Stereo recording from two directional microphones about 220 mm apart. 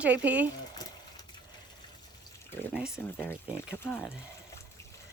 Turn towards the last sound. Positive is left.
turn(degrees=5)  # may be behind; listen again after turning